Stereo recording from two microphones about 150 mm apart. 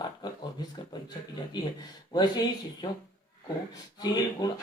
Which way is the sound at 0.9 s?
25° left (ahead or behind).